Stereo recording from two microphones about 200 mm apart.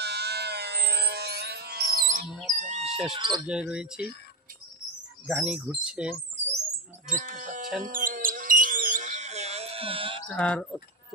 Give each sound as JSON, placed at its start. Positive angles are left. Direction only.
{"t": 0.0, "sound": "a sound", "side_deg": -55}
{"t": 2.2, "sound": "music", "side_deg": 0}
{"t": 2.5, "sound": "chicken", "side_deg": -35}
{"t": 3.1, "sound": "speech", "side_deg": -25}
{"t": 3.4, "sound": "speech", "side_deg": -5}
{"t": 5.2, "sound": "speech", "side_deg": -5}
{"t": 7.1, "sound": "sheep", "side_deg": -40}
{"t": 7.8, "sound": "a sound", "side_deg": -40}
{"t": 10.2, "sound": "speech", "side_deg": 5}